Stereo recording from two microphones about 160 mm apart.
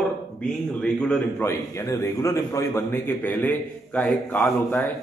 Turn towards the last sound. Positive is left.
turn(degrees=5)  # may be behind; listen again after turning